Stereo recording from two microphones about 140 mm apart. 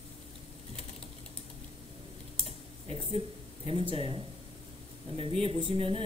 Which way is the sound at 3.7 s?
40° right (ahead or behind).